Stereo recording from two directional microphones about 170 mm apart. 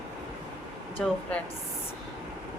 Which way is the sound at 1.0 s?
Centre (ahead or behind).